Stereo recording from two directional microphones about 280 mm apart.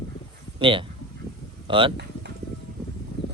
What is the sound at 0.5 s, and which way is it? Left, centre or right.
Speech, centre.